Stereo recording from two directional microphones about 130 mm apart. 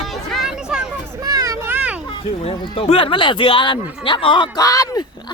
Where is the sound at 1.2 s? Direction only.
30° right (ahead or behind).